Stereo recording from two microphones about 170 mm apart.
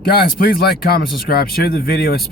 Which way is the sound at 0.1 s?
60° left (ahead or behind).